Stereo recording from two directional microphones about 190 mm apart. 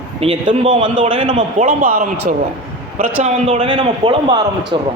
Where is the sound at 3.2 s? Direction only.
30° right (ahead or behind).